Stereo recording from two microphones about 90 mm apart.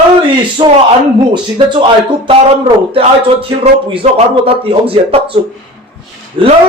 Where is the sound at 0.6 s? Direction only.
70° right (ahead or behind).